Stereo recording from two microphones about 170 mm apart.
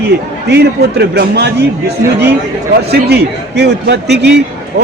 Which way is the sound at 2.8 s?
75° right (ahead or behind).